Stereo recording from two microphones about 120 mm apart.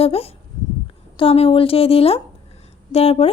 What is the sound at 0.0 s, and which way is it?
A woman's voice, 55° left (ahead or behind).